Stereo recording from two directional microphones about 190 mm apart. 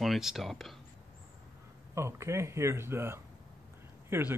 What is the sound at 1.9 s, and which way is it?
Speech, 15° right (ahead or behind).